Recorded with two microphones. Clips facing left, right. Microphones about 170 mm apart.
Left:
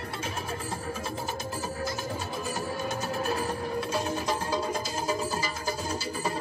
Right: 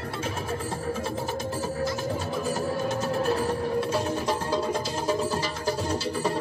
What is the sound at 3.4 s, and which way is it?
Music, 60° right (ahead or behind).